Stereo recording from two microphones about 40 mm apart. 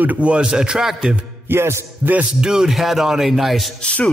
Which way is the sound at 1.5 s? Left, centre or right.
Right.